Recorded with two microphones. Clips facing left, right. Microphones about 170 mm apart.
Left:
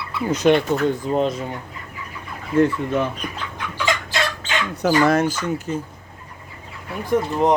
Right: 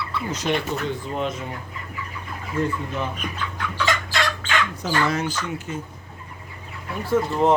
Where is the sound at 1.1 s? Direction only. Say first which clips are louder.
Left 6 dB; 35° left (ahead or behind).